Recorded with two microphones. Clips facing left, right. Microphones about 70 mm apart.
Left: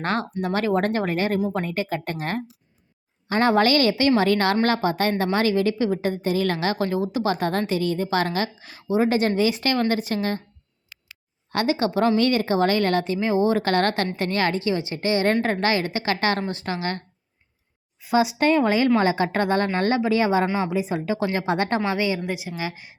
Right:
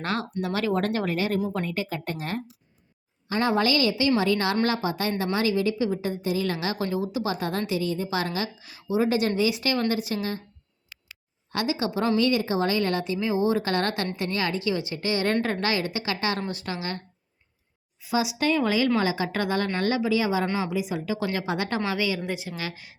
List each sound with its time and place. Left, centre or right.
0.0 s speech: left
1.4 s a woman's voice: left
1.6 s a woman's voice: left
11.5 s a woman's voice: left
11.9 s a woman's voice: left
14.6 s speech: left
16.5 s speech: left
18.0 s speech: left
21.8 s a woman's voice: left
22.3 s a woman's voice: centre